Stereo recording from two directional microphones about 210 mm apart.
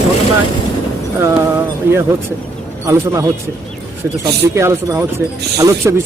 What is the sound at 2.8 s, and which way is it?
Speech, 15° right (ahead or behind).